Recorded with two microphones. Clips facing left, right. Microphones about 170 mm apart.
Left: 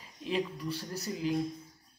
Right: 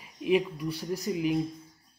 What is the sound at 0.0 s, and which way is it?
Speech, 15° right (ahead or behind).